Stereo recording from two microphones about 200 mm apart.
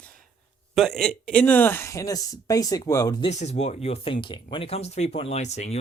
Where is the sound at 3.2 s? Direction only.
35° left (ahead or behind).